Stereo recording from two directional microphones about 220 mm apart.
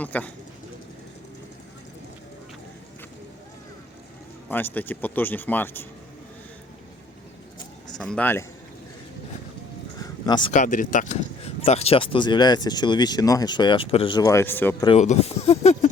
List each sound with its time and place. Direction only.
0.0 s speech: 5° left (ahead or behind)
4.4 s speech: 10° left (ahead or behind)
7.9 s speech: 5° left (ahead or behind)
10.0 s a sound: 20° left (ahead or behind)
10.5 s speech: 35° left (ahead or behind); by 14.8 s 10° left (ahead or behind)
14.8 s speech: 30° left (ahead or behind)